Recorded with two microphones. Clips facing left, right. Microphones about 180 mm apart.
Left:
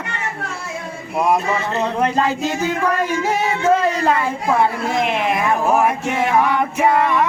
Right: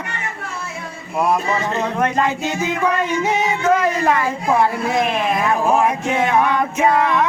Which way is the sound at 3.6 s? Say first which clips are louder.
Left 1 dB; 30° left (ahead or behind).